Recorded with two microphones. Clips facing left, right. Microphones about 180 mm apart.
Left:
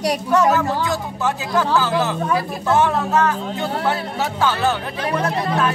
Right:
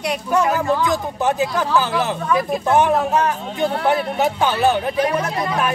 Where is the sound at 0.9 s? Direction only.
20° right (ahead or behind).